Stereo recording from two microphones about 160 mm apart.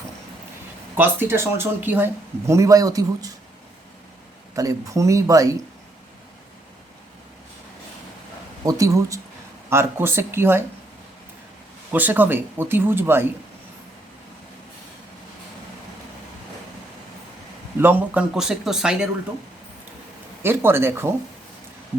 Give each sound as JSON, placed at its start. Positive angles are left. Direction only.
{"t": 0.9, "sound": "speech", "side_deg": -10}
{"t": 4.5, "sound": "speech", "side_deg": -20}
{"t": 8.6, "sound": "speech", "side_deg": -20}
{"t": 11.9, "sound": "speech", "side_deg": -10}
{"t": 17.7, "sound": "a man's voice", "side_deg": -10}
{"t": 20.4, "sound": "speech", "side_deg": -15}